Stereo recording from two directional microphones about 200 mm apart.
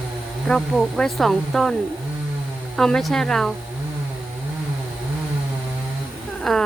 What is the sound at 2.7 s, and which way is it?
Speech, centre (ahead or behind).